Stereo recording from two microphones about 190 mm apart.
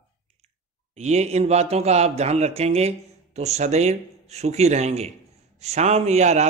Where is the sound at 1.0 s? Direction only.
35° right (ahead or behind).